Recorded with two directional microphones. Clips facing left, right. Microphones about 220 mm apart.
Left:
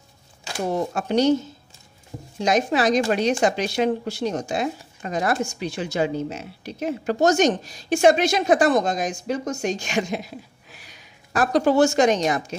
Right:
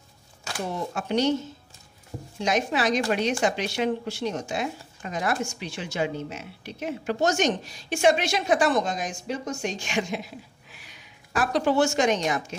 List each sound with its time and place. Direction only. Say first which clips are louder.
0.7 s a woman's voice: left 6 dB; 40° left (ahead or behind)
2.4 s a woman's voice: left 5 dB; 40° left (ahead or behind)